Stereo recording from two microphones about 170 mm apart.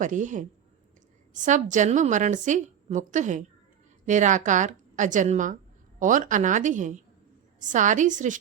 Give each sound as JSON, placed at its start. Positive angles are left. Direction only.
{"t": 0.0, "sound": "a woman's voice", "side_deg": -50}